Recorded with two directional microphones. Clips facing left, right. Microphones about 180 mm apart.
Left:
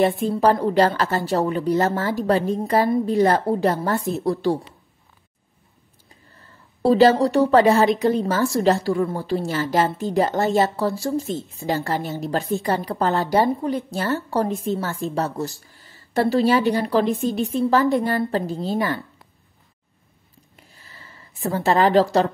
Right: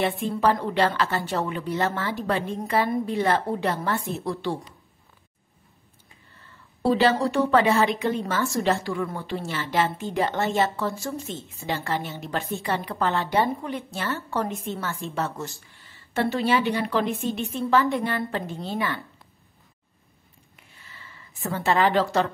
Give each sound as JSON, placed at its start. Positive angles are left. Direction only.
{"t": 0.0, "sound": "a woman's voice", "side_deg": 40}
{"t": 6.3, "sound": "a woman's voice", "side_deg": 40}
{"t": 20.5, "sound": "a sound", "side_deg": 35}